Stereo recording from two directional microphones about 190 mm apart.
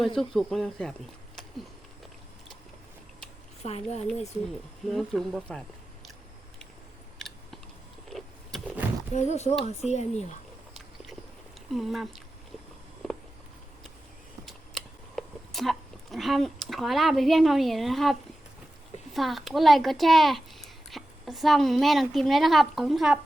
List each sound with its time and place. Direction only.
0.2 s speech: centre (ahead or behind)
3.6 s speech: 35° left (ahead or behind)
4.9 s speech: centre (ahead or behind)
7.2 s chewing: centre (ahead or behind)
8.1 s power windows: centre (ahead or behind)
9.1 s speech: 35° left (ahead or behind)
10.8 s a sound: centre (ahead or behind)
11.7 s speech: centre (ahead or behind)
13.0 s a sound: centre (ahead or behind)
14.4 s a sound: centre (ahead or behind)
19.1 s speech: centre (ahead or behind)